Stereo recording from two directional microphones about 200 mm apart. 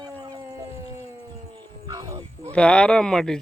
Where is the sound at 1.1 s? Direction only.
15° right (ahead or behind).